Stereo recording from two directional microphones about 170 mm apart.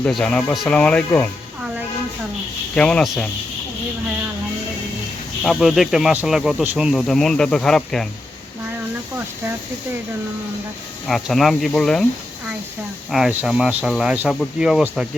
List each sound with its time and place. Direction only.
0.0 s speech: 5° left (ahead or behind)
2.7 s speech: 5° left (ahead or behind)
5.4 s speech: centre (ahead or behind)
11.1 s speech: centre (ahead or behind)
13.1 s speech: centre (ahead or behind)